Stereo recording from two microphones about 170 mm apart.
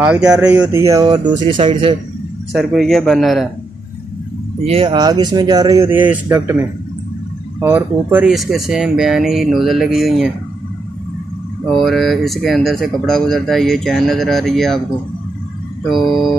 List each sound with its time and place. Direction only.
0.0 s speech: 5° right (ahead or behind)
0.7 s speech: 15° right (ahead or behind)
2.5 s speech: centre (ahead or behind)
4.6 s speech: 30° right (ahead or behind); by 10.3 s centre (ahead or behind)
11.8 s speech: centre (ahead or behind)
15.9 s speech: centre (ahead or behind)